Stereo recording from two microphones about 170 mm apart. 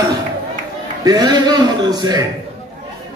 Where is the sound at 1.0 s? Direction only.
25° right (ahead or behind).